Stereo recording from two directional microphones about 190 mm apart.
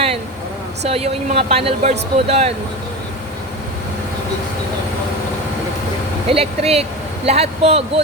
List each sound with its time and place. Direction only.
0.8 s speech: 35° right (ahead or behind)
6.2 s speech: 30° right (ahead or behind)